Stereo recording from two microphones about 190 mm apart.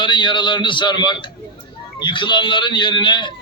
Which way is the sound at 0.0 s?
25° left (ahead or behind).